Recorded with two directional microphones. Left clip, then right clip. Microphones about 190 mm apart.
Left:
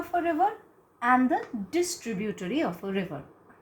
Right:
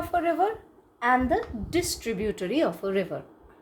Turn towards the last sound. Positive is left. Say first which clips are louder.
# right 4 dB
turn(degrees=-30)  # may be behind; listen again after turning